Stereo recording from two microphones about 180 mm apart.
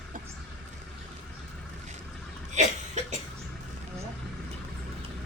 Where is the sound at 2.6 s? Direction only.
40° right (ahead or behind).